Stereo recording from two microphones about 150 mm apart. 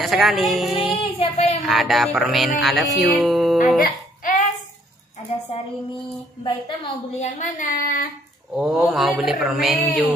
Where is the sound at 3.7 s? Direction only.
75° left (ahead or behind).